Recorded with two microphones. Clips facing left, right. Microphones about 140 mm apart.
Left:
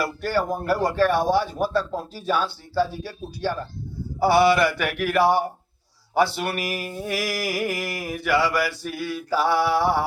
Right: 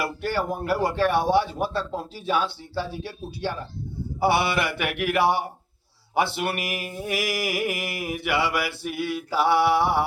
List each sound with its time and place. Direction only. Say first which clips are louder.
0.0 s mantra: left 2 dB; 20° right (ahead or behind)